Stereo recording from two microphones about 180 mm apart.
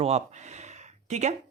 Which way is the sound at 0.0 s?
40° right (ahead or behind).